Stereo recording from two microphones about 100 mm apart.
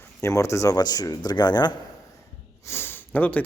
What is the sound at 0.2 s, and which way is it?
Speech, 30° left (ahead or behind).